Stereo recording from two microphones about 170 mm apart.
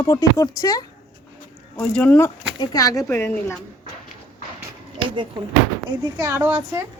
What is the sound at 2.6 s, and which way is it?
Speech, 20° left (ahead or behind).